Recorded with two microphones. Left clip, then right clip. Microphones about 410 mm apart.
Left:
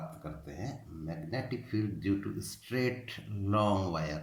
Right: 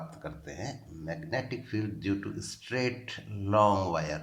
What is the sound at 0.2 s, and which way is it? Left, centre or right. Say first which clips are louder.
Speech: right 4 dB; centre.